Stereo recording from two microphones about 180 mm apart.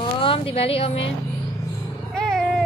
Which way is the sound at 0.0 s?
30° left (ahead or behind).